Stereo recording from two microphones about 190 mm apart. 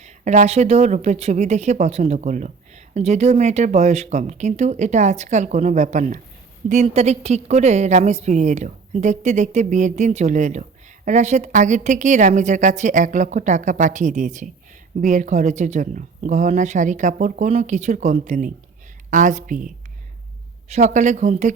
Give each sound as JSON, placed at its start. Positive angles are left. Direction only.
{"t": 0.0, "sound": "a woman's voice", "side_deg": -35}